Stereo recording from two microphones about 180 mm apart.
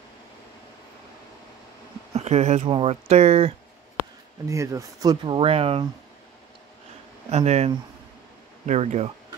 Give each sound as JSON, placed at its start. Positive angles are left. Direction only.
{"t": 2.1, "sound": "speech", "side_deg": -35}
{"t": 4.5, "sound": "speech", "side_deg": -15}
{"t": 7.2, "sound": "speech", "side_deg": -35}